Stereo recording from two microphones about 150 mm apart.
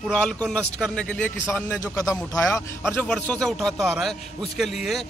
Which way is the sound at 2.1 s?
Centre (ahead or behind).